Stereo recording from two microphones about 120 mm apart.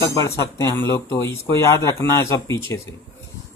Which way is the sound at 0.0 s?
25° left (ahead or behind).